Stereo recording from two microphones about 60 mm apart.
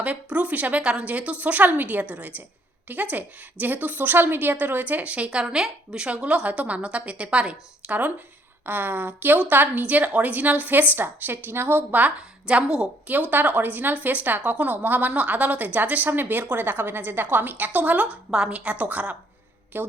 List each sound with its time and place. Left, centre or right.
0.0 s speech: right
13.3 s a woman's voice: right
18.3 s speech: centre
19.7 s a woman's voice: right